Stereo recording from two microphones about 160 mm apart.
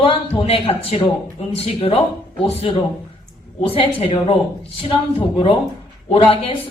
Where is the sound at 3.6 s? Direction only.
35° left (ahead or behind).